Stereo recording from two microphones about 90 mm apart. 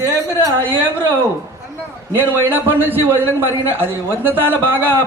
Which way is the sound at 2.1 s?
25° right (ahead or behind).